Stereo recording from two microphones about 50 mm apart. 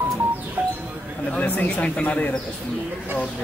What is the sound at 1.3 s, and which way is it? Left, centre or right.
A woman's voice, left.